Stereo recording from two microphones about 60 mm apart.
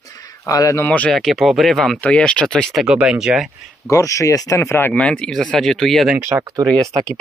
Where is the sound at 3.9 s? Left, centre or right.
Left.